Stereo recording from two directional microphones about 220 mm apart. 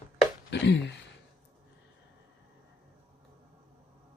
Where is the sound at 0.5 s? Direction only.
50° left (ahead or behind).